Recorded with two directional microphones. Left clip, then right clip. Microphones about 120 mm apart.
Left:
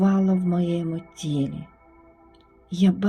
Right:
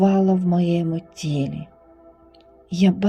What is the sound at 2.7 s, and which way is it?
Speech, 45° right (ahead or behind).